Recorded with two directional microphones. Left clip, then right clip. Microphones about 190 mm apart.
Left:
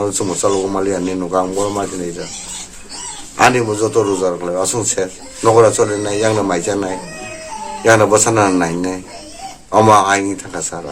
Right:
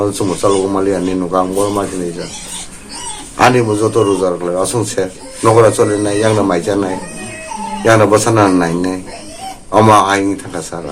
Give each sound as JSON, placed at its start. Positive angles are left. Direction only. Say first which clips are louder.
{"t": 0.0, "sound": "a man's voice", "louder": "right 3 dB", "side_deg": 25}
{"t": 3.3, "sound": "a man's voice", "louder": "right 2 dB", "side_deg": 20}